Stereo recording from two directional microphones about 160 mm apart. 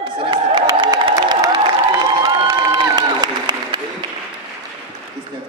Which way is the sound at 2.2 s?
25° right (ahead or behind).